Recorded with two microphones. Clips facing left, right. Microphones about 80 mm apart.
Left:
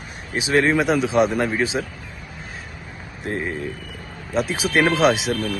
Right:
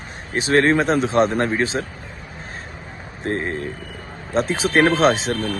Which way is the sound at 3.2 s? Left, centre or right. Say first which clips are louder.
Right 2 dB; right.